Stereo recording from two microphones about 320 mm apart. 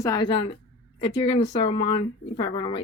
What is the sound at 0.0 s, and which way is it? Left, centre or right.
Speech, centre.